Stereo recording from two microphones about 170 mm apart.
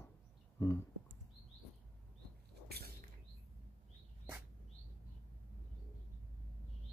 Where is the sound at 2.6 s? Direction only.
70° right (ahead or behind).